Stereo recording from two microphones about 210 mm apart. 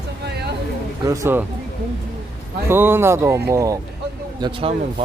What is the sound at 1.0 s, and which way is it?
Speech, 15° right (ahead or behind).